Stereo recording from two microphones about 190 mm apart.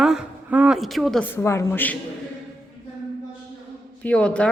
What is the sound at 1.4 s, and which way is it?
Speech, 15° left (ahead or behind).